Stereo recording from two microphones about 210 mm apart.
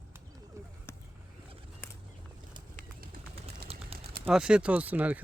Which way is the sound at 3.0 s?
45° right (ahead or behind).